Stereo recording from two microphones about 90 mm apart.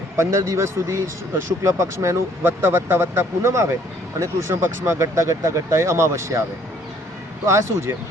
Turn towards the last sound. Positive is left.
turn(degrees=-30)  # may be behind; listen again after turning